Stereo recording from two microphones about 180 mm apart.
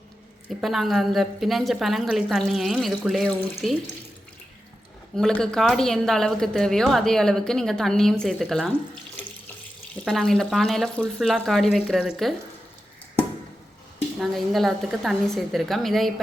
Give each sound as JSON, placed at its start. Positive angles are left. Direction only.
{"t": 0.6, "sound": "a woman's voice", "side_deg": 0}
{"t": 5.1, "sound": "a woman's voice", "side_deg": 5}
{"t": 10.0, "sound": "a woman's voice", "side_deg": 0}
{"t": 14.2, "sound": "a woman's voice", "side_deg": 0}